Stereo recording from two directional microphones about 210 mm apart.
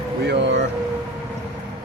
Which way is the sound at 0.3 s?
55° right (ahead or behind).